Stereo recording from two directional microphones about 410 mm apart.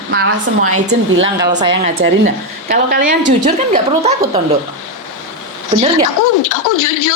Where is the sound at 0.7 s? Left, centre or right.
Right.